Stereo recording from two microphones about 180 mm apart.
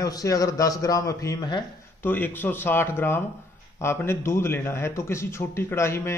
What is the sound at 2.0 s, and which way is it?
A man's voice, 10° left (ahead or behind).